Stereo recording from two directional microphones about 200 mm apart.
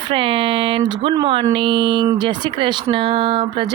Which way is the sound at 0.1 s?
25° right (ahead or behind).